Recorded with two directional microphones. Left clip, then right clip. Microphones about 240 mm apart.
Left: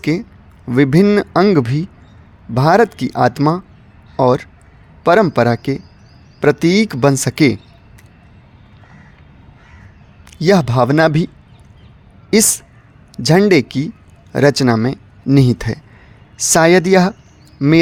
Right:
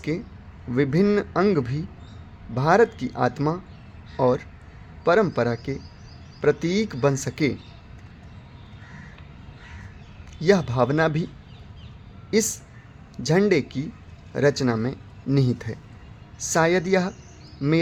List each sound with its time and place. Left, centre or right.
0.0 s a man's voice: left
10.3 s a man's voice: left
12.3 s a man's voice: left